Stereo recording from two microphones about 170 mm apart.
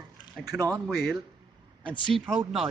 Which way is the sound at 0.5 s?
20° right (ahead or behind).